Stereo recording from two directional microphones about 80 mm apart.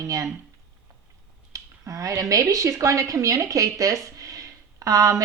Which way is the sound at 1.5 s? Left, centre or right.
Right.